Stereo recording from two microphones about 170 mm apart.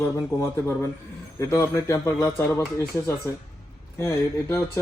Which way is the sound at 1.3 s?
20° left (ahead or behind).